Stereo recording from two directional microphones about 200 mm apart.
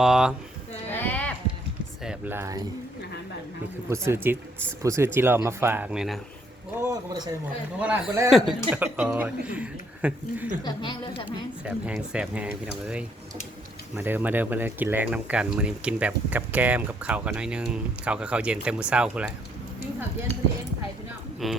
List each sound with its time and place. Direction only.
0.0 s speech: 5° right (ahead or behind)
0.9 s a sound: 10° left (ahead or behind)
2.0 s speech: 10° right (ahead or behind)
3.8 s speech: 15° right (ahead or behind)
6.8 s a man's voice: 20° right (ahead or behind)
7.8 s speech: 5° right (ahead or behind)
10.6 s a woman's voice: 20° left (ahead or behind)
11.3 s speech: 5° right (ahead or behind)
21.4 s speech: centre (ahead or behind)